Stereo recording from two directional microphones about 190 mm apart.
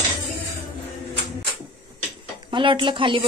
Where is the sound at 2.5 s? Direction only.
25° right (ahead or behind).